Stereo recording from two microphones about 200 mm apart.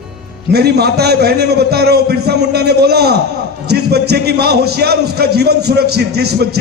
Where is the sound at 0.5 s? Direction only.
55° right (ahead or behind).